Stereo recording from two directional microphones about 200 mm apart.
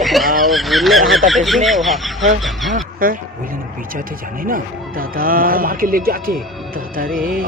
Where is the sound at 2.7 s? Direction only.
45° right (ahead or behind).